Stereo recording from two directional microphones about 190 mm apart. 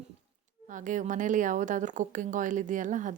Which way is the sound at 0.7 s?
40° right (ahead or behind).